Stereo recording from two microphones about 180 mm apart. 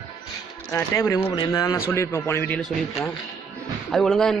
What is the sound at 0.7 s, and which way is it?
Speech, 15° left (ahead or behind).